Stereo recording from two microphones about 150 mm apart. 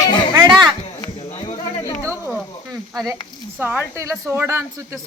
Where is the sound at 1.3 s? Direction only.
40° left (ahead or behind).